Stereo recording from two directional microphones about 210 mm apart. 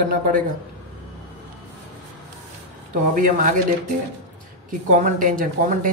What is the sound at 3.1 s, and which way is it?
Speech, 40° right (ahead or behind).